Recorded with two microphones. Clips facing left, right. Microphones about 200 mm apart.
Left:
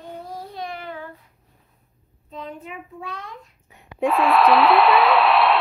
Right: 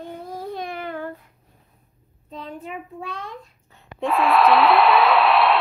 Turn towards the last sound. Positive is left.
turn(degrees=0)  # may be behind; listen again after turning